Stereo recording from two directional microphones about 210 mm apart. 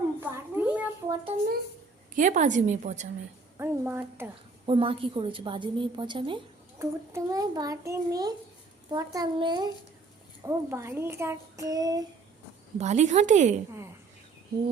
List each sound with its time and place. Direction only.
0.2 s a sound: 10° right (ahead or behind)
2.1 s a woman's voice: 35° right (ahead or behind)
3.6 s a child's voice: 10° right (ahead or behind)
4.6 s a woman's voice: 25° right (ahead or behind)
12.8 s a woman's voice: 35° right (ahead or behind)